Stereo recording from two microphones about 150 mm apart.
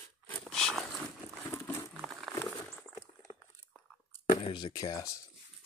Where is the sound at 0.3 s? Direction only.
5° left (ahead or behind).